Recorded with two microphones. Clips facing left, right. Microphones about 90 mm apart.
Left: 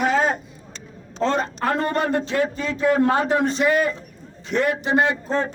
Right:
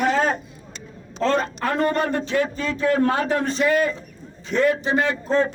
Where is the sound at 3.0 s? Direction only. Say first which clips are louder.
Left 2 dB; 20° left (ahead or behind).